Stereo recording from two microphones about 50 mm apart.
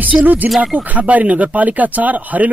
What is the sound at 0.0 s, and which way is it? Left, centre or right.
Speech, right.